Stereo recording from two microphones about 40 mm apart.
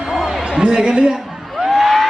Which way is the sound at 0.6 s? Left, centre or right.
Centre.